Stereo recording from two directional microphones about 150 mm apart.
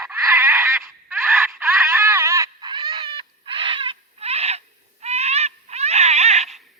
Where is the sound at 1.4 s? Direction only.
15° right (ahead or behind); by 4.6 s 45° right (ahead or behind).